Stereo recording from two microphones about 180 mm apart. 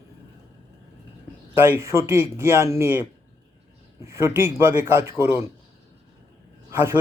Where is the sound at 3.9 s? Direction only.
15° right (ahead or behind).